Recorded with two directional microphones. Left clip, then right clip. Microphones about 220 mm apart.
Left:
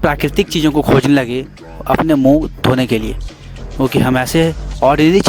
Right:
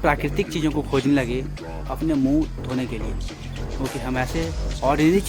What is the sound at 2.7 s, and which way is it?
Speech, 50° left (ahead or behind).